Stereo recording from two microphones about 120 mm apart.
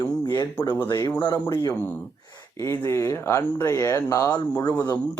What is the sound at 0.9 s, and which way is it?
Speech, 35° left (ahead or behind).